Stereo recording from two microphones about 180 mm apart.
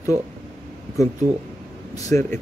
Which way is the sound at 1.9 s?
15° left (ahead or behind).